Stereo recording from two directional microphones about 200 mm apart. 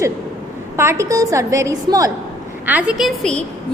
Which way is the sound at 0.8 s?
15° right (ahead or behind).